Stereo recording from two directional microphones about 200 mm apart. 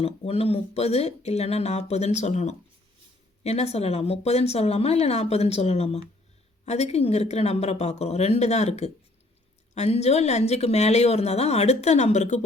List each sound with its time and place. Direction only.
0.0 s speech: 30° left (ahead or behind)